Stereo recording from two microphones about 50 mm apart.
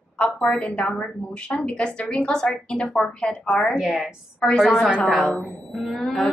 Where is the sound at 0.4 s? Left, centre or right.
Centre.